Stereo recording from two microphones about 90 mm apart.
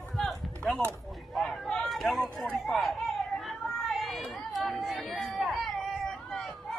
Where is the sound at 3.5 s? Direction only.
Centre (ahead or behind).